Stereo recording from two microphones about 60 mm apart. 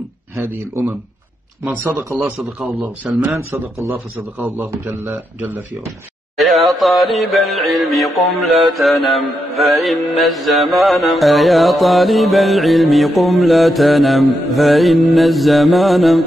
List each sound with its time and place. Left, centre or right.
1.6 s speech: right
2.1 s music: centre
3.0 s speech: centre
4.6 s a man's voice: right
6.3 s music: centre